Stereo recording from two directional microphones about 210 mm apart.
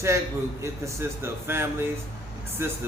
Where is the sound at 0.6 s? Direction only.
10° right (ahead or behind).